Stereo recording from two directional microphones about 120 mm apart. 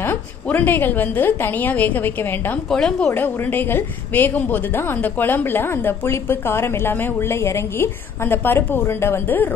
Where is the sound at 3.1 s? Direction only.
15° left (ahead or behind).